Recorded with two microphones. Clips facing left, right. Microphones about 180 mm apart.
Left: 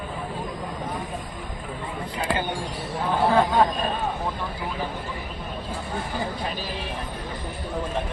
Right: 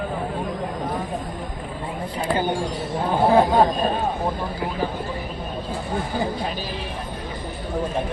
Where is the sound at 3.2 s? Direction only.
25° right (ahead or behind).